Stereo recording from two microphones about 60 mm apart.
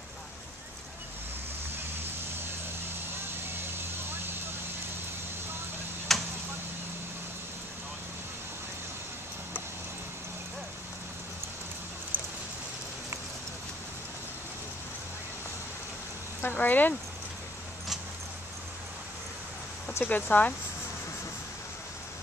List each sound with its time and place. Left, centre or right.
3.7 s vehicle: right
6.1 s a sound: centre
12.1 s rain: right
16.5 s speech: left
20.1 s speech: left